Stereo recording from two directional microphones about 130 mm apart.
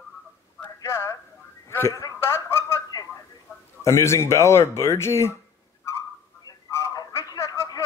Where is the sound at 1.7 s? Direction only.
20° left (ahead or behind).